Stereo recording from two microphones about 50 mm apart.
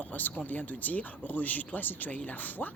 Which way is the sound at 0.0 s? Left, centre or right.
Left.